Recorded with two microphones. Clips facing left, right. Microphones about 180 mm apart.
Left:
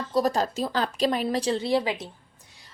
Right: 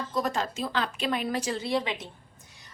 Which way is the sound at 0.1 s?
35° left (ahead or behind).